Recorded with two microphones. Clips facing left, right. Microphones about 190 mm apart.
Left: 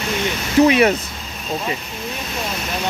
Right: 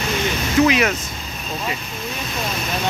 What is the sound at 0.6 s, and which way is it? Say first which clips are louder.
Speech: left 4 dB; 30° left (ahead or behind).